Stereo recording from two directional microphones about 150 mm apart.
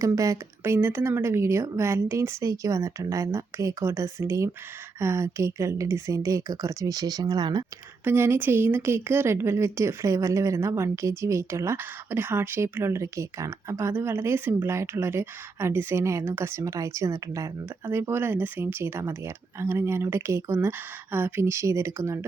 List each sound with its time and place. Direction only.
0.0 s a woman's voice: 20° right (ahead or behind)
8.0 s speech: 15° right (ahead or behind)